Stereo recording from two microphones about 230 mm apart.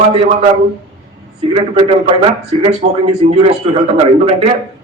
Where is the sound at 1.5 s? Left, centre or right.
Right.